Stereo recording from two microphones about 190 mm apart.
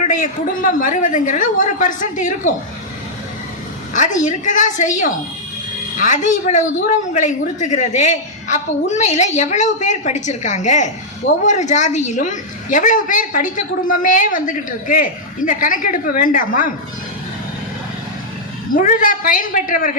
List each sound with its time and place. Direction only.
0.0 s a woman's voice: 40° left (ahead or behind)
3.9 s a woman's voice: 40° left (ahead or behind)
18.7 s a woman's voice: 45° left (ahead or behind)